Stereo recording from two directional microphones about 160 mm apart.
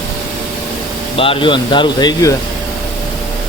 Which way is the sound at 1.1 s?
35° left (ahead or behind).